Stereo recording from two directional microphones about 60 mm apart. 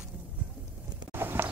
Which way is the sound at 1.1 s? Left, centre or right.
Right.